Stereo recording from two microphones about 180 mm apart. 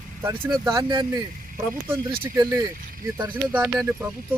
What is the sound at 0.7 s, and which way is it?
Speech, 25° right (ahead or behind).